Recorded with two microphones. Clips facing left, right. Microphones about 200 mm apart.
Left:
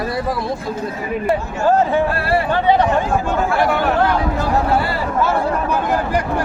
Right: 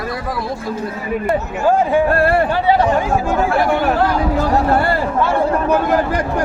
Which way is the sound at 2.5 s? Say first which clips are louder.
Even; 10° right (ahead or behind).